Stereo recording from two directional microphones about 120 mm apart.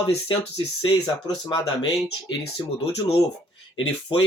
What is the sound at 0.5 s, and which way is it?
Speech, 40° left (ahead or behind).